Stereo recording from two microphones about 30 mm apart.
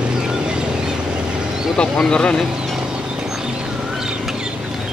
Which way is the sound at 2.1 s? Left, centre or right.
Left.